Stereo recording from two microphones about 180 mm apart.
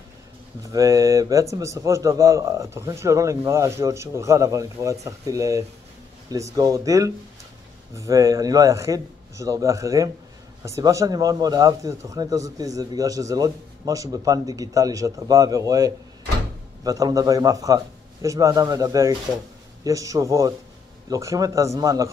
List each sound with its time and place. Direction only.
0.7 s a man's voice: 20° right (ahead or behind)